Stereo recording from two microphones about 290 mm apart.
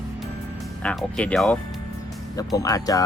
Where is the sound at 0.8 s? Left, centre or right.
Centre.